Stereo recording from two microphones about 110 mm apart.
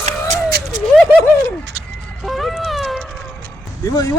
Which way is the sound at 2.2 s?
Centre (ahead or behind).